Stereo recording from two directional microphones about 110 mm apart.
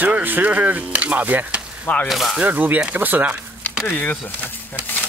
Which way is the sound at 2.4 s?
15° right (ahead or behind).